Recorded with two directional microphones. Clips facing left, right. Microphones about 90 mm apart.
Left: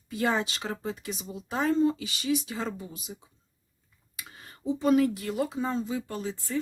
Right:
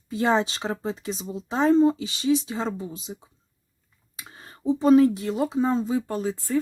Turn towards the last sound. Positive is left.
turn(degrees=-45)  # may be behind; listen again after turning